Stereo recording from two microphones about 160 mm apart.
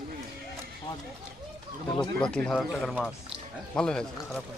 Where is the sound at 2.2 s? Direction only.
5° left (ahead or behind).